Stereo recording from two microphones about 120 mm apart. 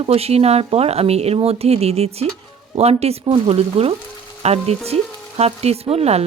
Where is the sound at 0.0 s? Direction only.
55° right (ahead or behind).